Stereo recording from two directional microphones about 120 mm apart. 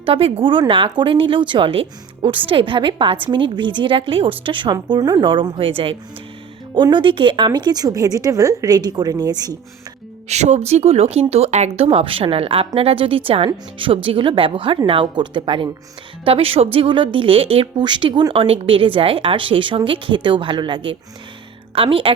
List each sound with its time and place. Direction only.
0.0 s a woman's voice: 50° right (ahead or behind); by 9.6 s 35° right (ahead or behind)
10.2 s a woman's voice: 70° right (ahead or behind); by 18.3 s 40° right (ahead or behind)
18.3 s a woman's voice: 50° right (ahead or behind)